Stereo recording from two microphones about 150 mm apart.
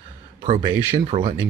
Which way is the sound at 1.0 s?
35° right (ahead or behind).